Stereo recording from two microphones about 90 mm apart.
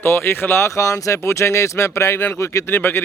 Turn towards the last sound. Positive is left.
turn(degrees=25)  # may be behind; listen again after turning